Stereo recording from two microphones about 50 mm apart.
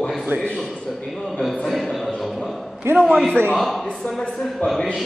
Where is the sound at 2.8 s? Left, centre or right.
Right.